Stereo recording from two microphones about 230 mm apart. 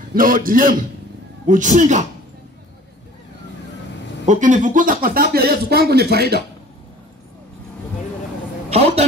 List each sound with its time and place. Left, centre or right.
0.1 s speech: right
4.3 s speech: right
8.6 s a sound: right